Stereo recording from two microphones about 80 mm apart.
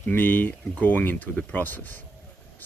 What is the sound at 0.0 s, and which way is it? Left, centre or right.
Speech, left.